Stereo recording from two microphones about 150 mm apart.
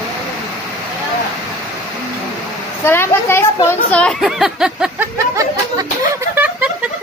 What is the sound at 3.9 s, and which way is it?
Speech, 5° left (ahead or behind).